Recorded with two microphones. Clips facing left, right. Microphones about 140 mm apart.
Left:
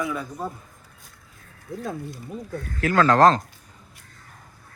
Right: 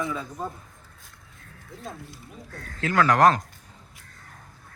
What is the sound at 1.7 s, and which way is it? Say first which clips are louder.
Speech: left 8 dB; 55° left (ahead or behind).